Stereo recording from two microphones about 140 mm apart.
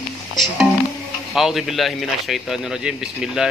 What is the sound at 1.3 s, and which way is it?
Speech, centre (ahead or behind).